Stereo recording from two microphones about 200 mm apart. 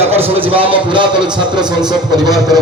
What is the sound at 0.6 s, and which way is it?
Speech, 25° right (ahead or behind).